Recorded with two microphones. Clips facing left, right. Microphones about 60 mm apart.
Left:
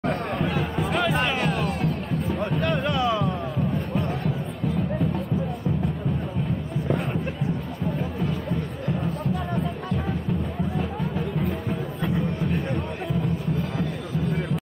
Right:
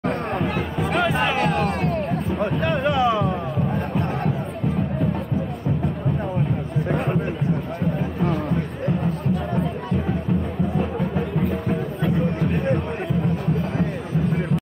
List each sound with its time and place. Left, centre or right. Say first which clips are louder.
0.9 s music: right 4 dB; centre
1.5 s music: right 4 dB; right
2.2 s music: left 1 dB; centre
10.8 s music: right 4 dB; centre